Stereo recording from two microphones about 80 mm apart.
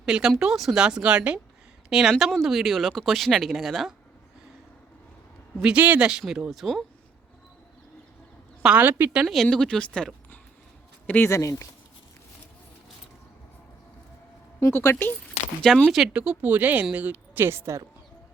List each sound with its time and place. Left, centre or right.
0.0 s speech: centre
5.7 s speech: centre
8.8 s a woman's voice: right
9.2 s speech: centre; by 11.3 s left
11.3 s speech: left
14.8 s speech: left
15.9 s speech: centre
17.4 s speech: right